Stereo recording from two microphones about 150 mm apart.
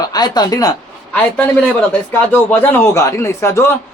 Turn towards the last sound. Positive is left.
turn(degrees=20)  # may be behind; listen again after turning